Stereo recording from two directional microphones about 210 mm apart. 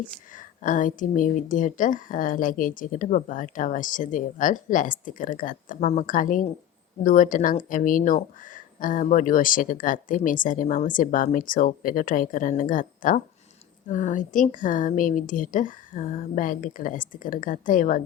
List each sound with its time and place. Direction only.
0.3 s speech: 40° left (ahead or behind)